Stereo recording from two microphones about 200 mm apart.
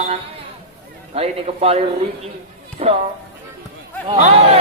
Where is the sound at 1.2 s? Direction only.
30° right (ahead or behind).